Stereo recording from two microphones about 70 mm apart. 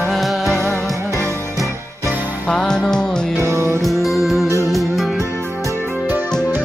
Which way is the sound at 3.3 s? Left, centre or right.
Right.